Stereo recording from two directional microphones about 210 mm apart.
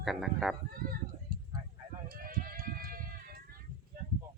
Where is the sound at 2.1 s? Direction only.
45° right (ahead or behind).